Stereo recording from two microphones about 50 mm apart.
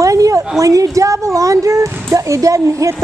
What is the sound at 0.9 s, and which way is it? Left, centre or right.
A child's voice, right.